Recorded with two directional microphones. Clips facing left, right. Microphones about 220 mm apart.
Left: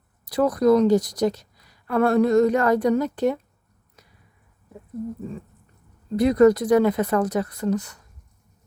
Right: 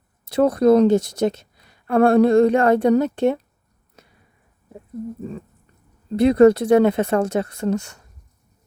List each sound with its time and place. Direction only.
0.3 s a woman's voice: 25° right (ahead or behind)
6.1 s a woman's voice: 25° right (ahead or behind)